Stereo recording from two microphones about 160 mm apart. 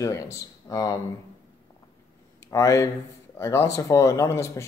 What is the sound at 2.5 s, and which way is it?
Speech, 20° left (ahead or behind).